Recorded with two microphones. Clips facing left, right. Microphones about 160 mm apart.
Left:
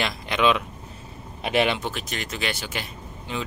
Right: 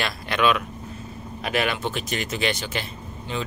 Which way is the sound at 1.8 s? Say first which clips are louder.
Right 3 dB; centre (ahead or behind).